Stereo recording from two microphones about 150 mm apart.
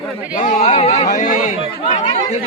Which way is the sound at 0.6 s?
45° left (ahead or behind).